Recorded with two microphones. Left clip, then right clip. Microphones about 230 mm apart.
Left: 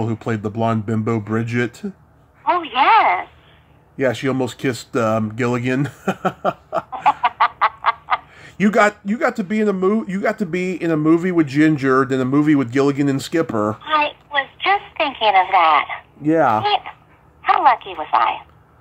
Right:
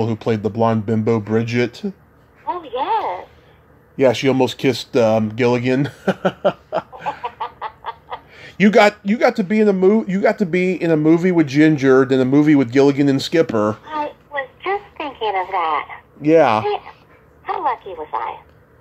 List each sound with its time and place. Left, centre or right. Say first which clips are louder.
0.0 s speech: right 4 dB; centre
2.4 s a sound: left 7 dB; left
3.9 s speech: right 4 dB; centre
7.0 s fowl: left 10 dB; left
8.4 s speech: right 4 dB; centre
13.8 s a sound: left 6 dB; left
16.2 s speech: right 3 dB; centre
16.6 s speech: left 3 dB; left
17.4 s telephone: left 7 dB; left